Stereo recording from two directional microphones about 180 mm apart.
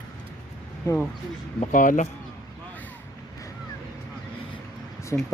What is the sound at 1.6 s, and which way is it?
Speech, 45° left (ahead or behind).